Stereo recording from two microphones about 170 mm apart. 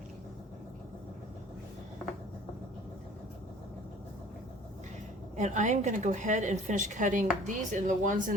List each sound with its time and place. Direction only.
5.4 s a woman's voice: 45° right (ahead or behind)